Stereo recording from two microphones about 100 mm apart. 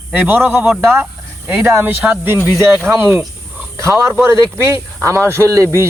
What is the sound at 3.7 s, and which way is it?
Speech, 30° right (ahead or behind).